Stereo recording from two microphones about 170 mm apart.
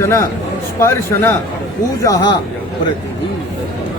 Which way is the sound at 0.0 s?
15° left (ahead or behind).